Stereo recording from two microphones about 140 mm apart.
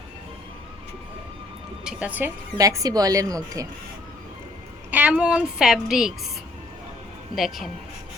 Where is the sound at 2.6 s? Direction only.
25° right (ahead or behind).